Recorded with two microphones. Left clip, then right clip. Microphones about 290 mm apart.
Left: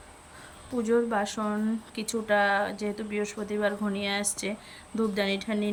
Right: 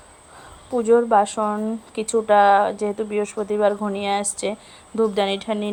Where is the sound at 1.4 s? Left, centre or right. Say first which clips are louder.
Right 9 dB; right.